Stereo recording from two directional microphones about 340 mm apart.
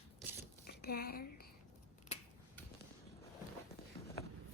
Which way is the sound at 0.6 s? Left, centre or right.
Left.